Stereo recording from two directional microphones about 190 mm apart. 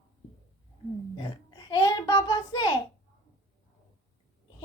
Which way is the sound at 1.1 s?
20° left (ahead or behind).